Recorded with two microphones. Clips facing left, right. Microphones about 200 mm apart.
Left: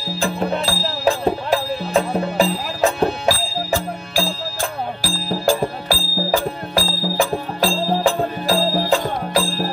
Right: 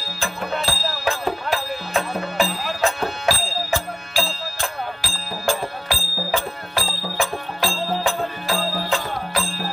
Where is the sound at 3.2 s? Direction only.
45° left (ahead or behind).